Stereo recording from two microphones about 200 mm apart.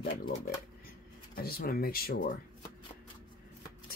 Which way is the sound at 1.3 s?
50° left (ahead or behind).